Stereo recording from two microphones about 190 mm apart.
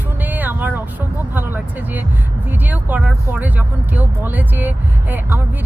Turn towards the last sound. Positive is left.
turn(degrees=-10)  # may be behind; listen again after turning